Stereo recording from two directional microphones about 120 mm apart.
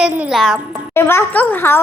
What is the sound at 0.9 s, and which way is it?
Speech, 20° left (ahead or behind).